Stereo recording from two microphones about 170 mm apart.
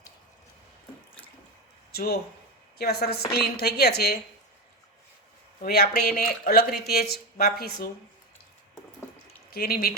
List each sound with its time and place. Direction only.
1.9 s a sound: 65° left (ahead or behind)
2.7 s a woman's voice: 70° left (ahead or behind)
5.6 s speech: 65° left (ahead or behind)
9.5 s speech: 65° left (ahead or behind)